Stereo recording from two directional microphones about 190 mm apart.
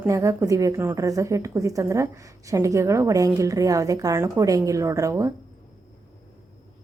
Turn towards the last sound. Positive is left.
turn(degrees=-15)  # may be behind; listen again after turning